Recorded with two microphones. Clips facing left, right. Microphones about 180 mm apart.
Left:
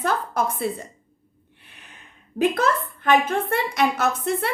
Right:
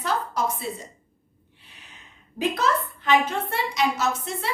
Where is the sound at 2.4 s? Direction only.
55° left (ahead or behind).